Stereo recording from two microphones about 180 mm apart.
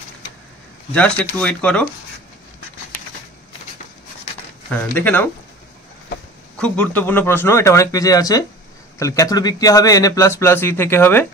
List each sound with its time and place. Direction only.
0.9 s speech: 5° left (ahead or behind)
4.6 s speech: 10° left (ahead or behind)
6.6 s speech: 10° left (ahead or behind)